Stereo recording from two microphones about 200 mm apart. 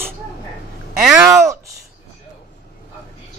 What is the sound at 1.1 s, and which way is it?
Speech, 15° right (ahead or behind).